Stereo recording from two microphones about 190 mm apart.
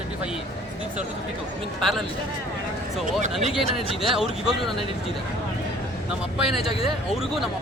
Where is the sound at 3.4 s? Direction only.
Centre (ahead or behind).